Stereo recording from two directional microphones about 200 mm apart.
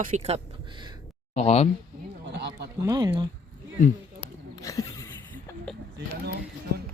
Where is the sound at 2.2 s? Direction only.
55° right (ahead or behind).